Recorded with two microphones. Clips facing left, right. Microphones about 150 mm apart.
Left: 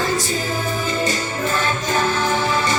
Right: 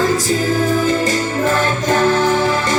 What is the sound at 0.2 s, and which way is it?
Music, 90° right.